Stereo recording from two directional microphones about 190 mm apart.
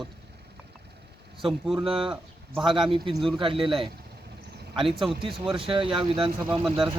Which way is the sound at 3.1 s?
Centre (ahead or behind).